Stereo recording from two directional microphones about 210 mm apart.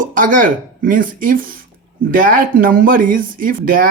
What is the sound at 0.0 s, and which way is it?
Speech, 40° right (ahead or behind).